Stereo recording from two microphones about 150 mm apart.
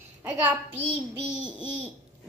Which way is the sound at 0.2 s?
10° right (ahead or behind).